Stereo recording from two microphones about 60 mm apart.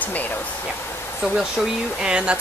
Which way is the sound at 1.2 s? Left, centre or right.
Centre.